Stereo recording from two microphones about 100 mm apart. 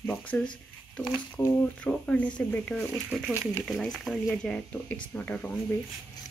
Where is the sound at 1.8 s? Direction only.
15° left (ahead or behind).